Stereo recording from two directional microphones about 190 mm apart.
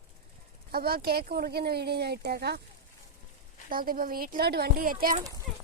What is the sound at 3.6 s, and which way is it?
A woman's voice, 50° right (ahead or behind).